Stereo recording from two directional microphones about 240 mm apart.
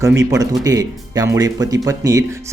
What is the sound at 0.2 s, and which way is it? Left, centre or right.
Speech, centre.